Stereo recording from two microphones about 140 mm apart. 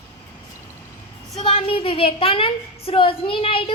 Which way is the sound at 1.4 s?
40° left (ahead or behind).